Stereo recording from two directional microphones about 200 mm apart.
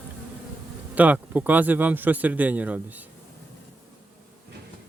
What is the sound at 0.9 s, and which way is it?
Speech, 10° right (ahead or behind).